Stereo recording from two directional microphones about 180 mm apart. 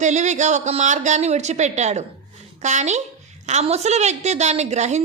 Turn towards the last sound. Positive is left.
turn(degrees=-40)  # may be behind; listen again after turning